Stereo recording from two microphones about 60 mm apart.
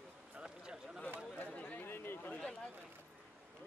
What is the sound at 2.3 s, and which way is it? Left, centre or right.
Speech, centre.